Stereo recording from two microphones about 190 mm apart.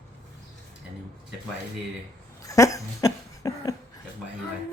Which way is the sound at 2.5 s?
15° left (ahead or behind).